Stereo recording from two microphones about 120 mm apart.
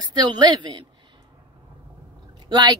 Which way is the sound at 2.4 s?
35° right (ahead or behind).